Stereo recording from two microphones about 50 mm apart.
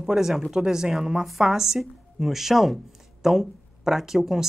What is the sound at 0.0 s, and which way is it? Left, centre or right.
Speech, centre.